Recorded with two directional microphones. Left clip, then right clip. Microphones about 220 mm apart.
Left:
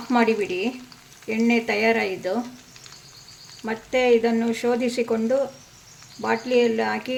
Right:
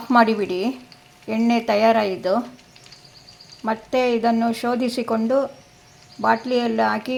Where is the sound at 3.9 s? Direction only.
15° right (ahead or behind).